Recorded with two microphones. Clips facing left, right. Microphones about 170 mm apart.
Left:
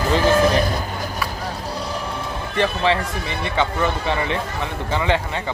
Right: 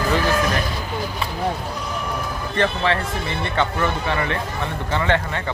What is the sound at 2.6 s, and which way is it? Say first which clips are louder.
A man's voice: left 1 dB; 15° left (ahead or behind).